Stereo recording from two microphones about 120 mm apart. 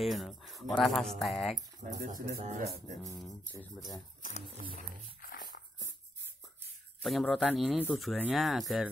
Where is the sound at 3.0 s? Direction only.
30° left (ahead or behind).